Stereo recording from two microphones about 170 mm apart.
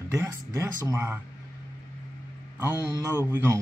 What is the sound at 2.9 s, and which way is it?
Speech, 15° right (ahead or behind).